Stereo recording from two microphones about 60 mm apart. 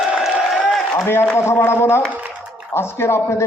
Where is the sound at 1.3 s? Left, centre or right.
Left.